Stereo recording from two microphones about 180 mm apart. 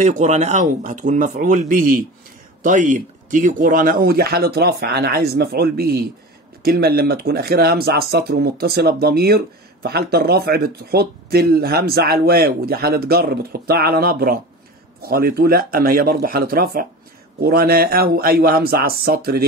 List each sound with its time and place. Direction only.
0.0 s speech: 40° right (ahead or behind)